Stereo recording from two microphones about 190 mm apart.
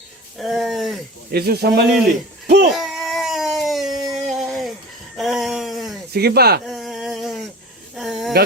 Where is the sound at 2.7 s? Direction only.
Centre (ahead or behind).